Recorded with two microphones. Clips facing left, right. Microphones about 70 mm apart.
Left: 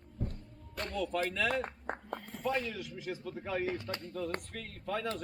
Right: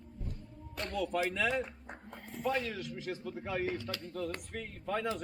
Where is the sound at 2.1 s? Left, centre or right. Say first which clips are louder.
Right 1 dB; centre.